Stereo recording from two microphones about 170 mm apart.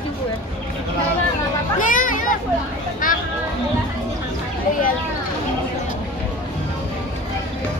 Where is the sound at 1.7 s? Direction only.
50° left (ahead or behind).